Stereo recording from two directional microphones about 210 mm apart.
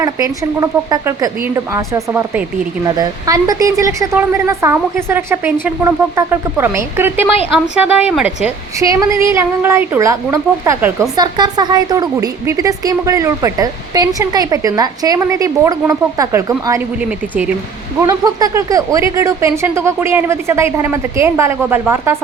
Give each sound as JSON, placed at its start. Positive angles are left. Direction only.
{"t": 0.0, "sound": "a woman's voice", "side_deg": -15}
{"t": 8.8, "sound": "a woman's voice", "side_deg": -15}
{"t": 11.2, "sound": "a woman's voice", "side_deg": -20}
{"t": 18.0, "sound": "a woman's voice", "side_deg": -15}